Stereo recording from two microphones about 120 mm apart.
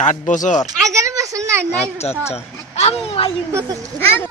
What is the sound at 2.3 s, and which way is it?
Speech, 60° left (ahead or behind).